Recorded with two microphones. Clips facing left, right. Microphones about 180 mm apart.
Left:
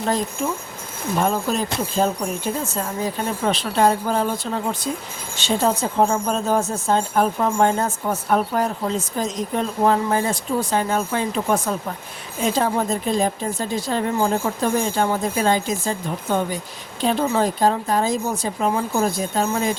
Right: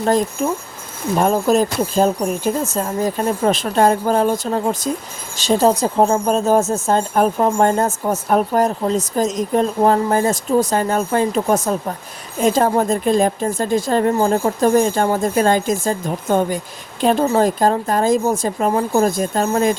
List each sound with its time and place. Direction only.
1.2 s speech: 45° right (ahead or behind)